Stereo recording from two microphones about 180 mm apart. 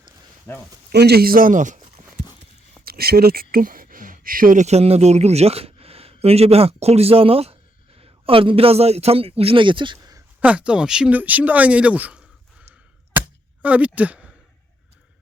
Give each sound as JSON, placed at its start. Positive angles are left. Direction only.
{"t": 0.5, "sound": "speech", "side_deg": 10}
{"t": 0.9, "sound": "speech", "side_deg": -65}
{"t": 2.8, "sound": "a man's voice", "side_deg": -60}
{"t": 10.4, "sound": "speech", "side_deg": -5}
{"t": 13.1, "sound": "a sound", "side_deg": -10}